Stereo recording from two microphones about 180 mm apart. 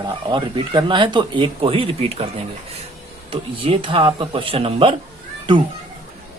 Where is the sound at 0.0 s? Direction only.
25° right (ahead or behind).